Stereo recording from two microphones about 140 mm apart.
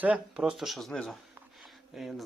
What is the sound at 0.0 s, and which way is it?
Speech, 10° right (ahead or behind).